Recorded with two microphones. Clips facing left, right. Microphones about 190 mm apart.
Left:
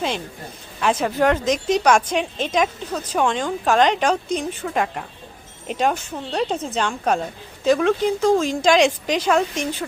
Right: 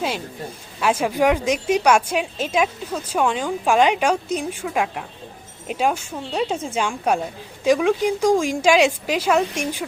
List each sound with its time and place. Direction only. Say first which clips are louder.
0.8 s a woman's voice: even; 5° right (ahead or behind)